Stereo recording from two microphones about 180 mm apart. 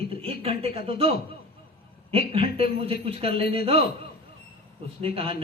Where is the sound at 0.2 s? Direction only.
30° right (ahead or behind).